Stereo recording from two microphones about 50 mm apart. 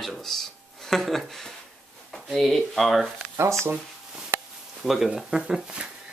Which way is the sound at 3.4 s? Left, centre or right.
Right.